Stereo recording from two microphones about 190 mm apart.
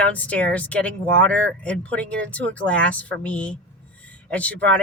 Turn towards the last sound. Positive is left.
turn(degrees=5)  # may be behind; listen again after turning